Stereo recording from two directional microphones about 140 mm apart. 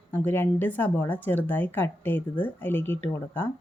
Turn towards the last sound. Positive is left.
turn(degrees=15)  # may be behind; listen again after turning